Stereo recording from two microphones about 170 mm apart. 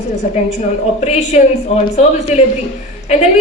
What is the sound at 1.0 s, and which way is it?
A woman's voice, 40° left (ahead or behind).